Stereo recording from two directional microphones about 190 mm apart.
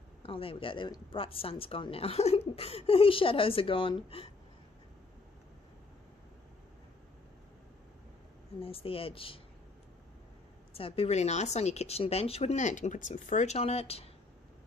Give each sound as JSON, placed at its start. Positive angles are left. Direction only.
{"t": 0.2, "sound": "speech", "side_deg": 30}
{"t": 8.5, "sound": "speech", "side_deg": 30}
{"t": 10.7, "sound": "speech", "side_deg": 30}